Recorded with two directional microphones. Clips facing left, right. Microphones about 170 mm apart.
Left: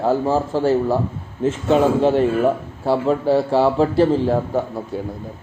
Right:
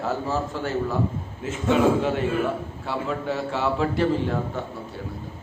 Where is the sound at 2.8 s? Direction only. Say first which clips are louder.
Left 11 dB; 35° left (ahead or behind).